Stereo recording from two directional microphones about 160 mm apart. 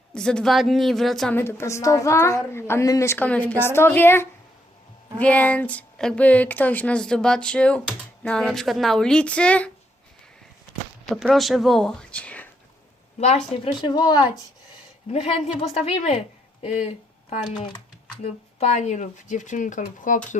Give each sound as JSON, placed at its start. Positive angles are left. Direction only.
{"t": 0.1, "sound": "speech", "side_deg": 5}
{"t": 1.4, "sound": "a woman's voice", "side_deg": 15}
{"t": 11.1, "sound": "speech", "side_deg": 0}
{"t": 13.1, "sound": "a woman's voice", "side_deg": 40}
{"t": 13.7, "sound": "speech", "side_deg": 30}
{"t": 15.1, "sound": "a woman's voice", "side_deg": 40}